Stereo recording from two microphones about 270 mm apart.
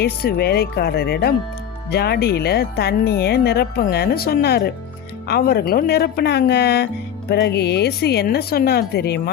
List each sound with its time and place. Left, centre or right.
0.0 s speech: left